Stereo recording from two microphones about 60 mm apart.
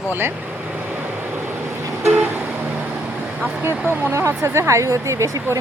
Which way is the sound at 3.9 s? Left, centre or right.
Right.